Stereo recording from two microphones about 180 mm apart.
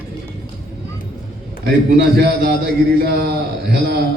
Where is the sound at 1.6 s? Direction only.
65° right (ahead or behind).